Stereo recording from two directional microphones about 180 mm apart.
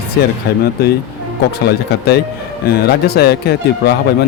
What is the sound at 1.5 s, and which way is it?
Speech, 65° left (ahead or behind).